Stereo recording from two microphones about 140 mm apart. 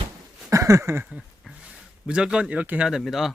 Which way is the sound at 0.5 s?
20° right (ahead or behind).